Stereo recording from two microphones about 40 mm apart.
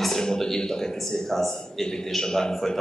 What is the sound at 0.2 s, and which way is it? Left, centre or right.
A man's voice, centre.